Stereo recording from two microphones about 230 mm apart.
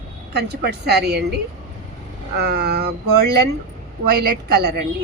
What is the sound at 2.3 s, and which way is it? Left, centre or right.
A woman's voice, right.